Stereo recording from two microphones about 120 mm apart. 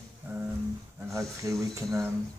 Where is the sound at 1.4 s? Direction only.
30° right (ahead or behind).